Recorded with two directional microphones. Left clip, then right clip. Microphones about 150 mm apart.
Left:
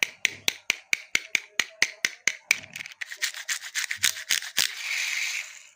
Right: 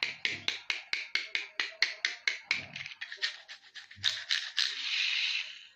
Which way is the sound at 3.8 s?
50° left (ahead or behind).